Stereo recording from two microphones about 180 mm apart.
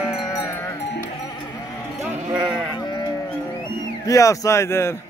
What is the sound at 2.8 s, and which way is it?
Livestock, 20° left (ahead or behind).